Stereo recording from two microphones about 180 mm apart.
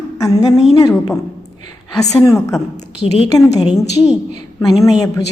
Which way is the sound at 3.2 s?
20° left (ahead or behind).